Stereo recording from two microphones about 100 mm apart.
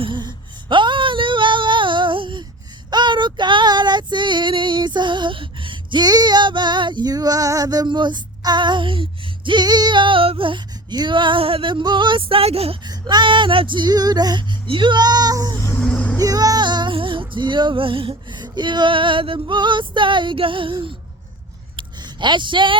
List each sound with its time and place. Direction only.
0.0 s a sound: 50° right (ahead or behind)
2.9 s female singing: 50° right (ahead or behind); by 12.7 s 80° right
12.8 s female singing: 45° right (ahead or behind)
15.5 s vehicle: 25° left (ahead or behind)
15.9 s music: 15° left (ahead or behind)
16.2 s female singing: 35° right (ahead or behind); by 20.7 s 55° right (ahead or behind)
21.8 s a sound: 50° right (ahead or behind)